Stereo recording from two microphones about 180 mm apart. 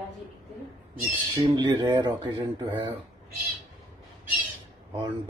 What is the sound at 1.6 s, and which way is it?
Speech, 25° right (ahead or behind).